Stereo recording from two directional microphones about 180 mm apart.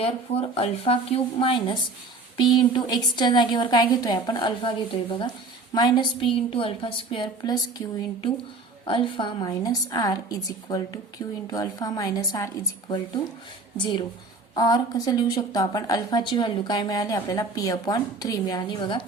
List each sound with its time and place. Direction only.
0.0 s a woman's voice: 35° left (ahead or behind)
8.9 s a woman's voice: 25° left (ahead or behind)
13.7 s a woman's voice: 25° left (ahead or behind)